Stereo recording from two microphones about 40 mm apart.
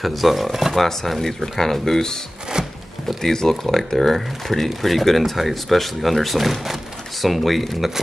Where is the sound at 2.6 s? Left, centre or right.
Centre.